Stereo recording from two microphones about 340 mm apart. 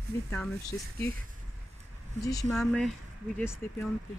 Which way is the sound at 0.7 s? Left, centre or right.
Centre.